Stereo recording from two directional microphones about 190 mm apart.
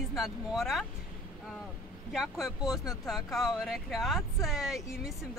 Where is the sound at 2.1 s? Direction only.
Centre (ahead or behind).